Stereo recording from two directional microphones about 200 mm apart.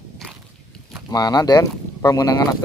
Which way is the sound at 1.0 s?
20° left (ahead or behind).